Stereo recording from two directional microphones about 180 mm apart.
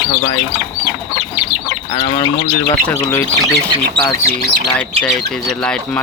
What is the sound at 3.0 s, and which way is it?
Speech, 15° left (ahead or behind).